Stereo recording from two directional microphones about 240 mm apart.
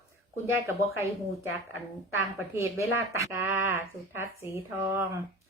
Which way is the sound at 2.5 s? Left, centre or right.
Centre.